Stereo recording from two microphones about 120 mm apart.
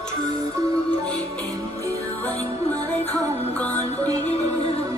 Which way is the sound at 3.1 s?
15° left (ahead or behind).